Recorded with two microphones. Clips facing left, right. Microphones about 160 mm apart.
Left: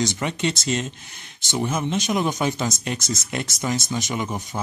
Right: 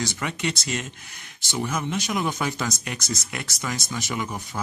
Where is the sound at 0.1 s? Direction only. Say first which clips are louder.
Left 4 dB; 25° left (ahead or behind).